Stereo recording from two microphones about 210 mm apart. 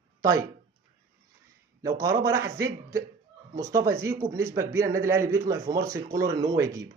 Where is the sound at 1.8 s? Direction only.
15° right (ahead or behind).